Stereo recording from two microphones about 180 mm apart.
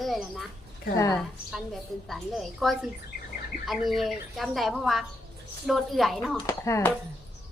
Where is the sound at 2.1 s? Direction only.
Centre (ahead or behind).